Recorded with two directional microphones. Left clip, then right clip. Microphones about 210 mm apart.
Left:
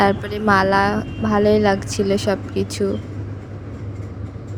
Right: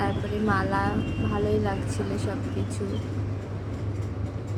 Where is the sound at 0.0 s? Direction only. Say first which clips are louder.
Left 10 dB; 45° left (ahead or behind).